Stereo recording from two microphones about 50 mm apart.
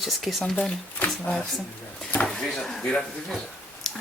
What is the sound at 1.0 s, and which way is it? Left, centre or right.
Speech, left.